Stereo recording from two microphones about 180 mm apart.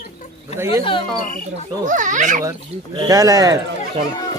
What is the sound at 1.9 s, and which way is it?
Speech, 45° right (ahead or behind).